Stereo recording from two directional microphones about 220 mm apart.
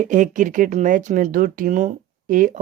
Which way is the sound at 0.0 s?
35° right (ahead or behind).